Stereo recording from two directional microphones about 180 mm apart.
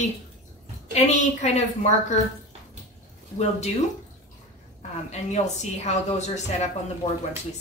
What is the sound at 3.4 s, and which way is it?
Speech, 40° left (ahead or behind).